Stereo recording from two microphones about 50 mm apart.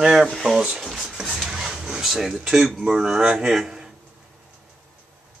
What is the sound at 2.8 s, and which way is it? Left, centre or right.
Speech, centre.